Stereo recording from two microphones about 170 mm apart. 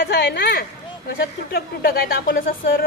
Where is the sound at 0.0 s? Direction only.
65° left (ahead or behind).